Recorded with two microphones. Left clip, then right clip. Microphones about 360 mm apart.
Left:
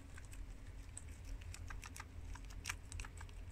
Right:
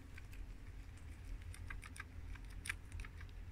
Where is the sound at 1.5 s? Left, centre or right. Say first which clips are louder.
Even; centre.